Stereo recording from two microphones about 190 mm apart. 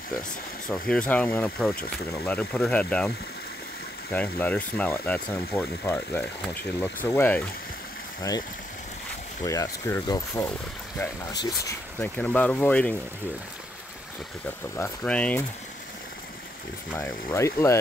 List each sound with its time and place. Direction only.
0.7 s speech: 5° left (ahead or behind)
4.1 s speech: 5° left (ahead or behind)
9.4 s speech: 15° left (ahead or behind)
12.0 s speech: 5° left (ahead or behind)
14.8 s speech: 5° left (ahead or behind)
16.9 s speech: 15° left (ahead or behind)